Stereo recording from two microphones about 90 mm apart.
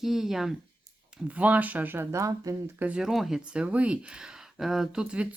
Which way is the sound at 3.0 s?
5° right (ahead or behind).